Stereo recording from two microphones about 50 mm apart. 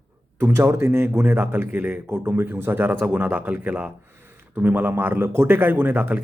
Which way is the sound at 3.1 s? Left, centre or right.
Right.